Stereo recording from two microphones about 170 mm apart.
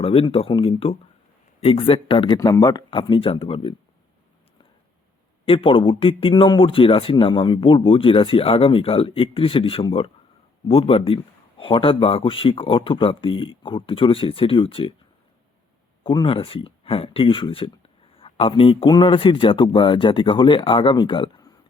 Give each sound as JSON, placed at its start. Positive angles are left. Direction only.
{"t": 0.0, "sound": "speech", "side_deg": 35}
{"t": 5.5, "sound": "speech", "side_deg": 30}
{"t": 16.0, "sound": "a man's voice", "side_deg": 30}